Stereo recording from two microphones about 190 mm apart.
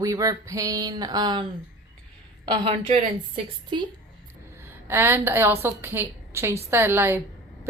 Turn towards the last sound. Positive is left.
turn(degrees=-10)  # may be behind; listen again after turning